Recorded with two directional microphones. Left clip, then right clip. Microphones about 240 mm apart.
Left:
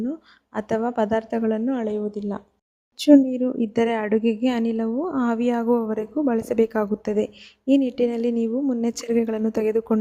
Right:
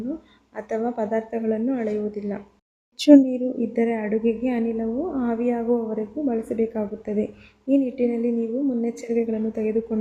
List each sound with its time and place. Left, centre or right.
0.5 s a woman's voice: left
3.0 s speech: centre
3.3 s a woman's voice: left